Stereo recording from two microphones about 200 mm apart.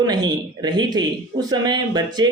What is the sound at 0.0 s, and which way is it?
Speech, 20° right (ahead or behind).